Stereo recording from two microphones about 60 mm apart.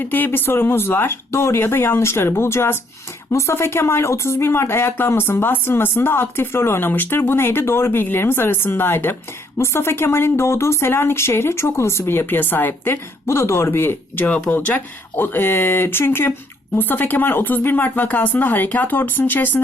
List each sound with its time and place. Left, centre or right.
0.0 s speech: left
14.5 s speech: left